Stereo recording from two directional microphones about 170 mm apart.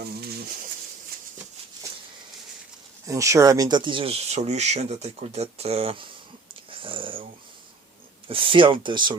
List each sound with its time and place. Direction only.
0.0 s bird: 70° right (ahead or behind)
3.1 s speech: 20° right (ahead or behind); by 6.1 s 35° right (ahead or behind)
6.7 s dog: 30° right (ahead or behind)
8.3 s speech: 30° right (ahead or behind)